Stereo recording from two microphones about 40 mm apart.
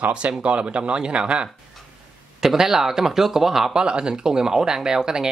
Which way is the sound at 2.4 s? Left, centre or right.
Centre.